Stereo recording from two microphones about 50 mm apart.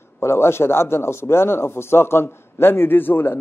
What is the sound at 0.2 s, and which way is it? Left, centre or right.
A man's voice, left.